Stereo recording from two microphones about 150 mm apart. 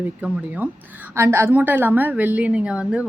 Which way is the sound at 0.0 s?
10° right (ahead or behind).